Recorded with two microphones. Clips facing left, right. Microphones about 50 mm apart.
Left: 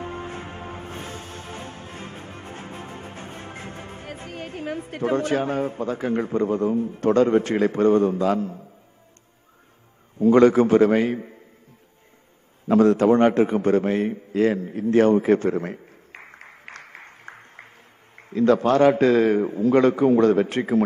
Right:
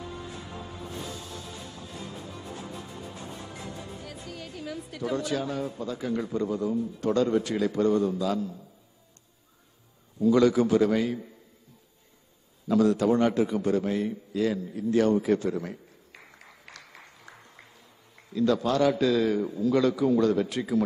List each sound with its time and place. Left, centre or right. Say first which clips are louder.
0.0 s music: left 6 dB; left
10.1 s a man's voice: left 6 dB; left
12.6 s a man's voice: left 6 dB; left